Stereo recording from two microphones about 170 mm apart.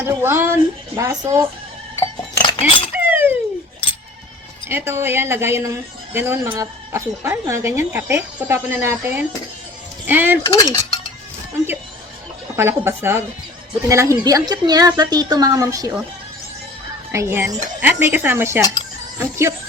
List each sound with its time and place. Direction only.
0.0 s speech: 15° right (ahead or behind)
2.4 s chink: 30° left (ahead or behind)
2.9 s chink: 10° right (ahead or behind)
4.7 s speech: 15° right (ahead or behind)
10.4 s cutlery: 20° left (ahead or behind)
12.5 s a woman's voice: 15° right (ahead or behind)
17.1 s speech: 15° right (ahead or behind)